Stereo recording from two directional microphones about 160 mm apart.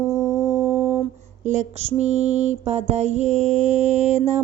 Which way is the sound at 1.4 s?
45° right (ahead or behind).